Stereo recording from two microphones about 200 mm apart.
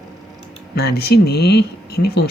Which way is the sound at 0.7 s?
50° left (ahead or behind).